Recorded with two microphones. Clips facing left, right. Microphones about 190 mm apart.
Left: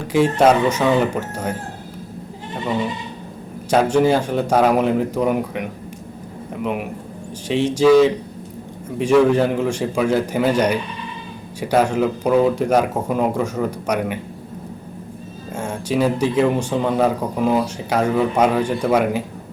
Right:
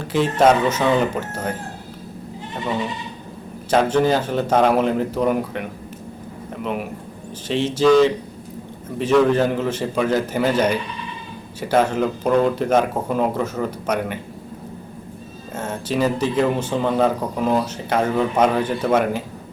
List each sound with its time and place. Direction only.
0.1 s speech: 5° left (ahead or behind)
3.7 s a man's voice: 10° left (ahead or behind)
11.6 s speech: 5° left (ahead or behind)
15.9 s speech: 10° left (ahead or behind)